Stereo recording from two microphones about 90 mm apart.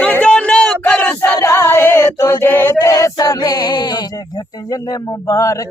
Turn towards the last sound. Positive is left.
turn(degrees=40)  # may be behind; listen again after turning